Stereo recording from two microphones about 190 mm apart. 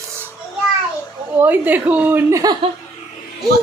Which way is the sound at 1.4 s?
10° right (ahead or behind).